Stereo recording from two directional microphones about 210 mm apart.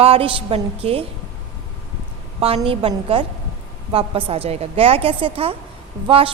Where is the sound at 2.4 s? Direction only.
30° right (ahead or behind).